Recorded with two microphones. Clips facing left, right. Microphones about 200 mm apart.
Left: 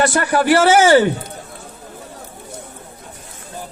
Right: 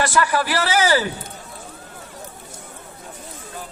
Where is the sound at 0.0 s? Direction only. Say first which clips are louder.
Left 4 dB; 45° left (ahead or behind).